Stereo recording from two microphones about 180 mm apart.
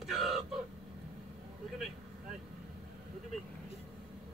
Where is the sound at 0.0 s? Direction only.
Centre (ahead or behind).